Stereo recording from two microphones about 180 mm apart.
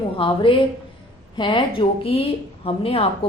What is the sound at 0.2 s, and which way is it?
A woman's voice, 30° left (ahead or behind).